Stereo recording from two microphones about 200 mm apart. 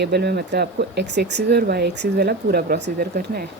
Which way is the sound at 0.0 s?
55° right (ahead or behind).